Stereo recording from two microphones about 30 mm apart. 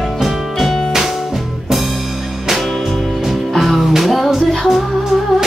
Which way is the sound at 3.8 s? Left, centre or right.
Centre.